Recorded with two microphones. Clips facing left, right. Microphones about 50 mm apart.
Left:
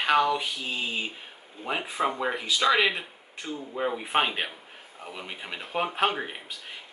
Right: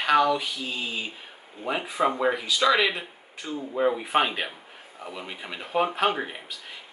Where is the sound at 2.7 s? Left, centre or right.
Centre.